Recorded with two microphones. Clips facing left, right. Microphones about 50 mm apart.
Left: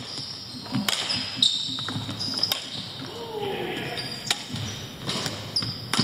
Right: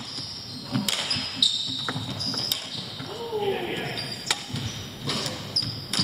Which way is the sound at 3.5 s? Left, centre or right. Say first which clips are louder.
Right 1 dB; centre.